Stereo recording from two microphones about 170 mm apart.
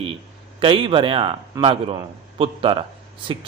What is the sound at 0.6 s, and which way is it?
A man's voice, 30° right (ahead or behind).